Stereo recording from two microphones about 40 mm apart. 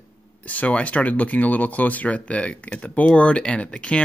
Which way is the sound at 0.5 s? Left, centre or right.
Left.